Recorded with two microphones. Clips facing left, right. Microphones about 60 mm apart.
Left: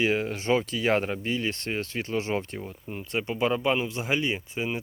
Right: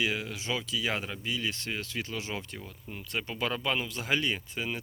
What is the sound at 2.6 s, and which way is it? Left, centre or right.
Speech, left.